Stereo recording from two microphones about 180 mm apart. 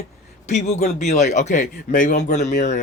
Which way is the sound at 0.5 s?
40° left (ahead or behind).